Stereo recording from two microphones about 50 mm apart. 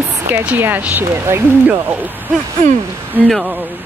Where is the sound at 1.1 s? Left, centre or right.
Right.